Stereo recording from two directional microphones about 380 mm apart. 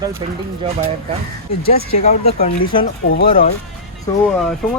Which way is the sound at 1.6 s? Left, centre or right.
Left.